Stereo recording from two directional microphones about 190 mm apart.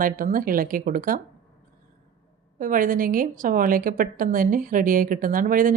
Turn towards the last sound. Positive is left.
turn(degrees=-45)  # may be behind; listen again after turning